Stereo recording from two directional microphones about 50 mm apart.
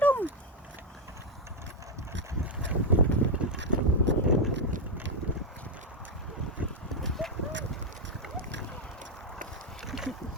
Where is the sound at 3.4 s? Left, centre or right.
Right.